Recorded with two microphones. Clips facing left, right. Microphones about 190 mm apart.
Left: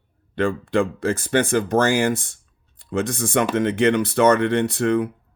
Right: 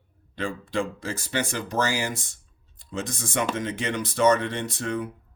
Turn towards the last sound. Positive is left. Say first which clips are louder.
# left 10 dB
turn(degrees=65)  # may be behind; listen again after turning